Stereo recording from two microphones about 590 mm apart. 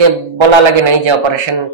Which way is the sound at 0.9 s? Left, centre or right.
Right.